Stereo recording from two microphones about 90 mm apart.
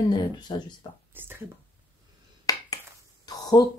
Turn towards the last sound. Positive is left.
turn(degrees=45)  # may be behind; listen again after turning